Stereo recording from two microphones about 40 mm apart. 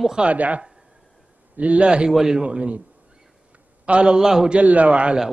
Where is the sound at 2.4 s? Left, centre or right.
Right.